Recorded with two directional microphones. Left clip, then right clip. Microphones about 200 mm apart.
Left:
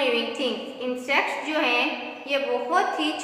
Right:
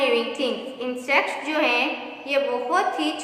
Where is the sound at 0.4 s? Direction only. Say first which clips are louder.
Right 1 dB; 15° right (ahead or behind).